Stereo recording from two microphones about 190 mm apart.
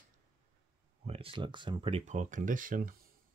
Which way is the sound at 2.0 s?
40° right (ahead or behind).